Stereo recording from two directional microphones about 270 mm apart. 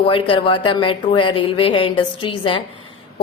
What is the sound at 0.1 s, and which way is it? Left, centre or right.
A woman's voice, centre.